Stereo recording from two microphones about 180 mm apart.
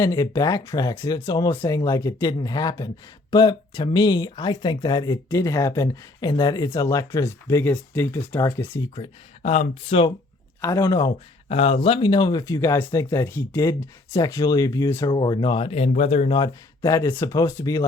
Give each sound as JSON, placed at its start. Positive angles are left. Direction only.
{"t": 0.0, "sound": "speech", "side_deg": 20}
{"t": 9.0, "sound": "speech", "side_deg": 40}
{"t": 10.6, "sound": "speech", "side_deg": 20}
{"t": 16.4, "sound": "speech", "side_deg": 20}